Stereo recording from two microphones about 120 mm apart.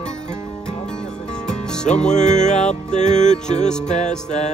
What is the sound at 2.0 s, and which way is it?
Music, 80° left.